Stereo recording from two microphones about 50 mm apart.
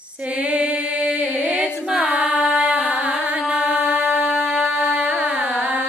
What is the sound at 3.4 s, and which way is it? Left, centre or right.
Chant, centre.